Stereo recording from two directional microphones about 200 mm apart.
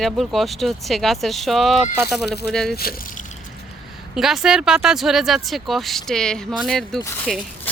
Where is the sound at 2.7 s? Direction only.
50° left (ahead or behind).